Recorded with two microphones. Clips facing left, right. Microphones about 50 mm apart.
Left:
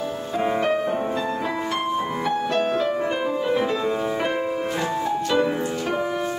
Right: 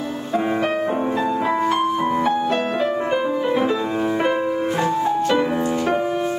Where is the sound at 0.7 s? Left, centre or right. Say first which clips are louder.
Right 1 dB; right.